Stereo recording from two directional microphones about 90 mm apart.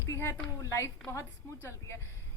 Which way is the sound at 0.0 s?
30° left (ahead or behind).